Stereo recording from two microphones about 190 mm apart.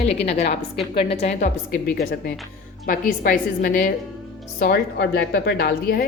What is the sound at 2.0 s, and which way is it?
A woman's voice, 50° left (ahead or behind).